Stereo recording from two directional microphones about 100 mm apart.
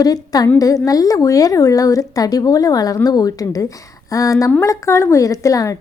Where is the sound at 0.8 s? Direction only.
35° left (ahead or behind).